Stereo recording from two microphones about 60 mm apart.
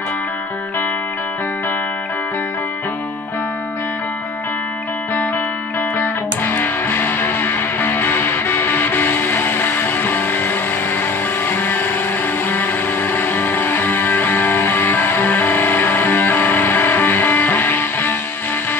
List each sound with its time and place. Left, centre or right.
5.9 s music: left